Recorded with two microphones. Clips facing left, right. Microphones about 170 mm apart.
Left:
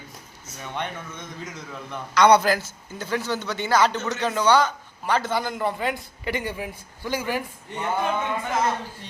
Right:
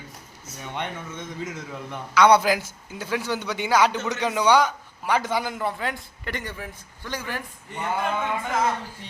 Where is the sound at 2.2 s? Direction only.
5° right (ahead or behind).